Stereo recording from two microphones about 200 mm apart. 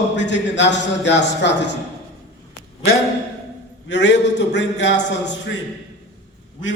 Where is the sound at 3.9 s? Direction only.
60° left (ahead or behind).